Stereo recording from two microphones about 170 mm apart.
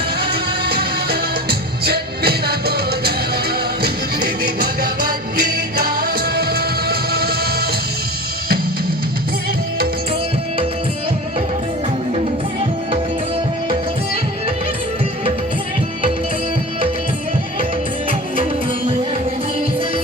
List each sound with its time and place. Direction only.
0.7 s music: 65° right (ahead or behind)
5.8 s music: 65° right (ahead or behind)